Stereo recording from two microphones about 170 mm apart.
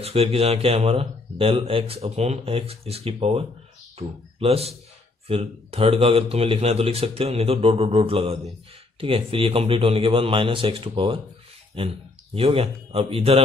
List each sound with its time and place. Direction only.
0.0 s speech: 35° right (ahead or behind)
12.4 s speech: 35° right (ahead or behind)